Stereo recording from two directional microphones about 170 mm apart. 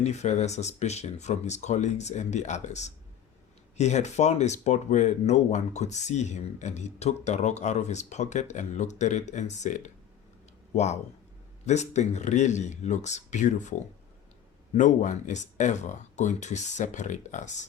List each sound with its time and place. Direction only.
0.0 s speech: 40° left (ahead or behind)
11.6 s speech: 40° left (ahead or behind)